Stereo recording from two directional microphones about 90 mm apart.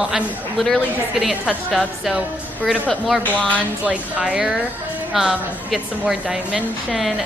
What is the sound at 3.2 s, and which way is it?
Speech, 15° left (ahead or behind).